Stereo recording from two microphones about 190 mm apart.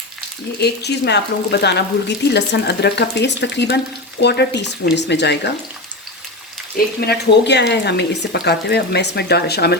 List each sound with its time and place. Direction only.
0.6 s speech: 60° left (ahead or behind)
7.0 s speech: 60° left (ahead or behind)